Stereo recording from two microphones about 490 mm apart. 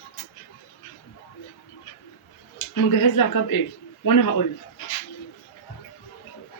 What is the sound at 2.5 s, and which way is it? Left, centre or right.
Speech, left.